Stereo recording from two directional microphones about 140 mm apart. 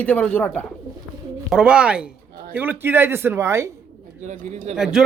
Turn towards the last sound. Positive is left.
turn(degrees=-5)  # may be behind; listen again after turning